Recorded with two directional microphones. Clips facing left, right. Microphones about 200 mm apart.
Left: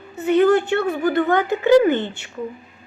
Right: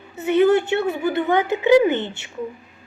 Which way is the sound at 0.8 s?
20° right (ahead or behind).